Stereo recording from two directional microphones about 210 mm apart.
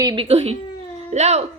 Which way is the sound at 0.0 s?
20° right (ahead or behind).